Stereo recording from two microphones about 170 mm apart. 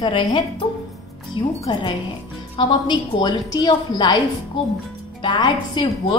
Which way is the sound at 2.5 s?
25° left (ahead or behind).